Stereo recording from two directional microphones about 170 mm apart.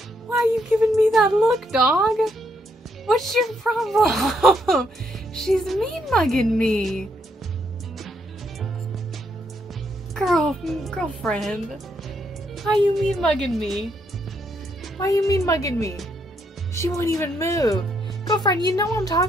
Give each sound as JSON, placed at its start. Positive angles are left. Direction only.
{"t": 0.3, "sound": "a woman's voice", "side_deg": 0}
{"t": 10.1, "sound": "a woman's voice", "side_deg": 0}
{"t": 15.0, "sound": "a woman's voice", "side_deg": 20}